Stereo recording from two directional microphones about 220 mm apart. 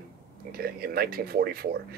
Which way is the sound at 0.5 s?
45° right (ahead or behind).